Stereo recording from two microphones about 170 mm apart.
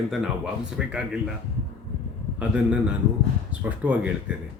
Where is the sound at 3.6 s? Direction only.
10° right (ahead or behind).